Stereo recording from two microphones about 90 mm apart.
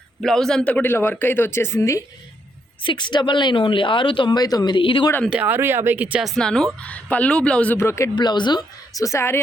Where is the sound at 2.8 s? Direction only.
55° left (ahead or behind).